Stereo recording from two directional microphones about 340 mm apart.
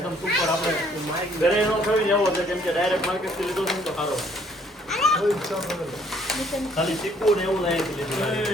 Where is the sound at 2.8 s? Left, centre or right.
Centre.